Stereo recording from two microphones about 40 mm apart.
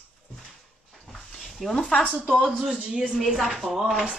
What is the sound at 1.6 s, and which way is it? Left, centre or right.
Speech, centre.